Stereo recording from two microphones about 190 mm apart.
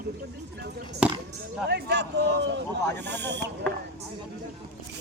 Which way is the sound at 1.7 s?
60° right (ahead or behind).